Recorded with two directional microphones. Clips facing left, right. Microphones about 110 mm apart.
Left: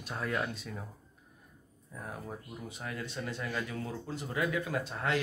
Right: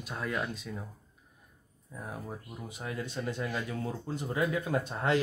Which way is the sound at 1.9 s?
10° right (ahead or behind).